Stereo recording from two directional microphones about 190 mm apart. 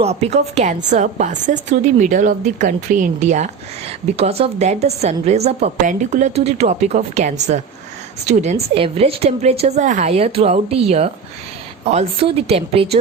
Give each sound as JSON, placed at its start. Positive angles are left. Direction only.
{"t": 0.0, "sound": "a woman's voice", "side_deg": -35}